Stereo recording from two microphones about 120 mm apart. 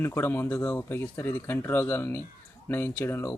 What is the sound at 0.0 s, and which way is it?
Speech, 20° left (ahead or behind).